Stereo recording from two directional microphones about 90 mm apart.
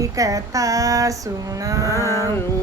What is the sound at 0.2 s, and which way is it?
Female singing, 40° right (ahead or behind).